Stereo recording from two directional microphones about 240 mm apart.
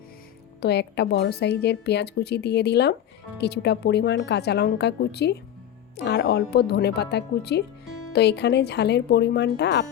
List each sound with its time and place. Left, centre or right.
0.6 s a woman's voice: left